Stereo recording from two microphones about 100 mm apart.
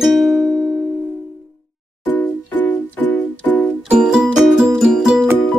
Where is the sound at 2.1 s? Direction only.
20° left (ahead or behind).